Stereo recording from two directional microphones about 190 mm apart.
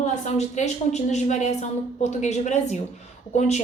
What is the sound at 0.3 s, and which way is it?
A woman's voice, 35° left (ahead or behind).